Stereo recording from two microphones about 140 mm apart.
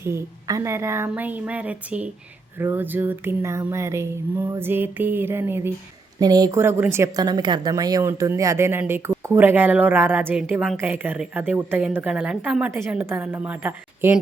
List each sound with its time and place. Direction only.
0.0 s speech: 20° right (ahead or behind)
6.1 s speech: 30° right (ahead or behind)
6.6 s speech: 15° right (ahead or behind)